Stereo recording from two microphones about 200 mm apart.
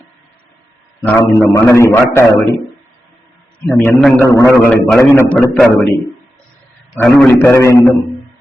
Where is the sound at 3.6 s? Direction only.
10° left (ahead or behind).